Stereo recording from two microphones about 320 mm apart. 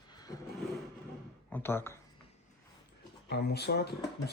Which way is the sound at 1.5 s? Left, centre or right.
Centre.